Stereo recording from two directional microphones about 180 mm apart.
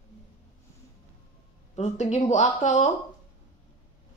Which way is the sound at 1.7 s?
40° left (ahead or behind).